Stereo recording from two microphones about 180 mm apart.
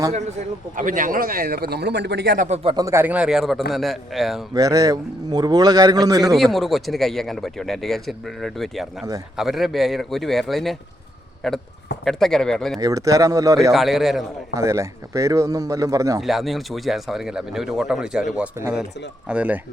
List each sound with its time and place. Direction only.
0.8 s speech: 50° right (ahead or behind)
2.7 s speech: 15° right (ahead or behind); by 4.4 s centre (ahead or behind)
4.5 s a man's voice: 20° right (ahead or behind)
6.3 s speech: centre (ahead or behind)
12.8 s a man's voice: 20° right (ahead or behind)
13.7 s speech: centre (ahead or behind)
14.5 s speech: 15° right (ahead or behind)
16.2 s speech: centre (ahead or behind)